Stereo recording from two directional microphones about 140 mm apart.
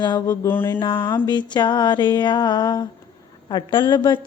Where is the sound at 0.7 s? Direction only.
35° left (ahead or behind).